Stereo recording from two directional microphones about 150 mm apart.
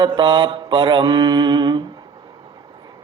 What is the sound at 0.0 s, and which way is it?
Mantra, 30° right (ahead or behind).